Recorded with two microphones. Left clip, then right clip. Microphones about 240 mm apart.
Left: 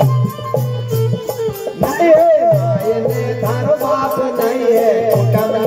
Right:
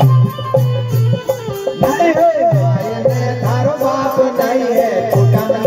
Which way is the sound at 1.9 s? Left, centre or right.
Right.